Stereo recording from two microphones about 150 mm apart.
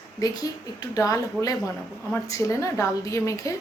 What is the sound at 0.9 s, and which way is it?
A woman's voice, 20° left (ahead or behind).